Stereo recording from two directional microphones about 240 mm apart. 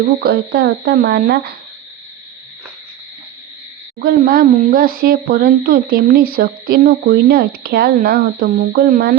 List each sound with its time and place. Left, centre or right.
0.0 s speech: right
4.0 s speech: right